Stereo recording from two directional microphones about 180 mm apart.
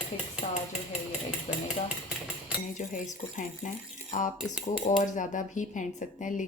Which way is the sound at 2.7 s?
45° left (ahead or behind).